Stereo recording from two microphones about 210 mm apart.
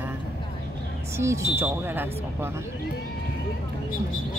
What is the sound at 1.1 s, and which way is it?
Speech, 15° right (ahead or behind).